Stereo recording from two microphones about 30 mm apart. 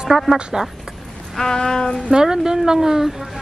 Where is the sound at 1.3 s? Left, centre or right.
Centre.